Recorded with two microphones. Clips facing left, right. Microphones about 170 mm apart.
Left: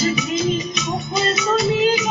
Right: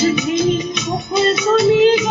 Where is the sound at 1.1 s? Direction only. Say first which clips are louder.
Right 6 dB; 55° right (ahead or behind).